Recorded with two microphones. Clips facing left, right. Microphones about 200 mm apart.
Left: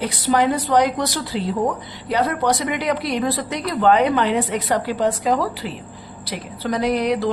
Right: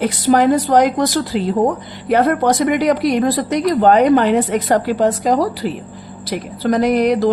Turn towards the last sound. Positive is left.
turn(degrees=-45)  # may be behind; listen again after turning